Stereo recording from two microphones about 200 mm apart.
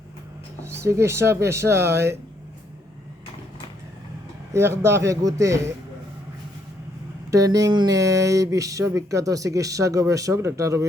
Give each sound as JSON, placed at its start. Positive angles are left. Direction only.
{"t": 0.8, "sound": "speech", "side_deg": -15}
{"t": 4.5, "sound": "speech", "side_deg": -15}
{"t": 7.3, "sound": "speech", "side_deg": -15}